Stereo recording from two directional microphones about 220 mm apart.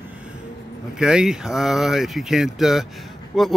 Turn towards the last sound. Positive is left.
turn(degrees=0)  # may be behind; listen again after turning